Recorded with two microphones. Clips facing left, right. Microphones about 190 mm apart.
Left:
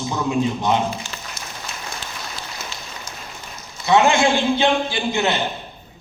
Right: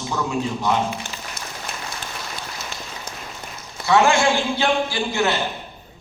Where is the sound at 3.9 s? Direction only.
20° left (ahead or behind).